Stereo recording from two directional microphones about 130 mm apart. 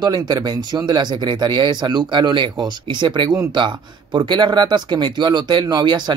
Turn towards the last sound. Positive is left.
turn(degrees=-35)  # may be behind; listen again after turning